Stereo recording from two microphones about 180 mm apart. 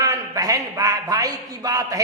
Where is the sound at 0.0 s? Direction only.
20° right (ahead or behind).